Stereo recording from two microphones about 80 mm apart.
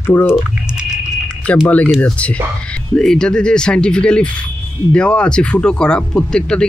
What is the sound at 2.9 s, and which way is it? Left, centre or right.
Speech, centre.